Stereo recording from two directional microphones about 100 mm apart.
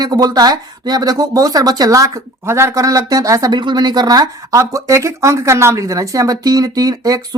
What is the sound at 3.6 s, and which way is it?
Speech, 45° right (ahead or behind).